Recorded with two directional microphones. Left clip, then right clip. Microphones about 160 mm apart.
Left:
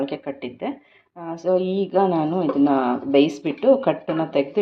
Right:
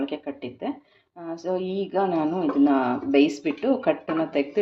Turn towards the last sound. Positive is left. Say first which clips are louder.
# left 3 dB
turn(degrees=15)  # may be behind; listen again after turning